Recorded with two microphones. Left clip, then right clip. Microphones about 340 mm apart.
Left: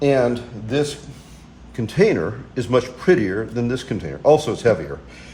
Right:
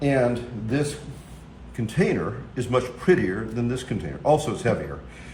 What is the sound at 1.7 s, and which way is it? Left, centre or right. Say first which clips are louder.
Speech: left 7 dB; left.